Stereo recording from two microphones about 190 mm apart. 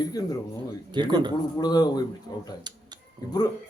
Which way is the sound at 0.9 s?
25° right (ahead or behind).